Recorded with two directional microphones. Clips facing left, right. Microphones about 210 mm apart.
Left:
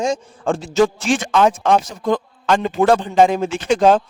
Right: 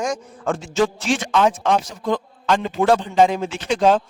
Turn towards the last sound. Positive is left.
turn(degrees=45)  # may be behind; listen again after turning